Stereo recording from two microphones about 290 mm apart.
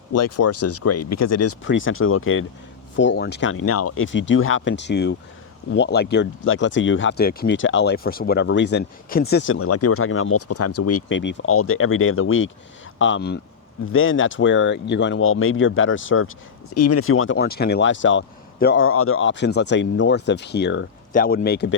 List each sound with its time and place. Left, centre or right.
0.1 s speech: left
1.6 s speech: left
9.6 s speech: left
11.2 s speech: left
16.7 s speech: left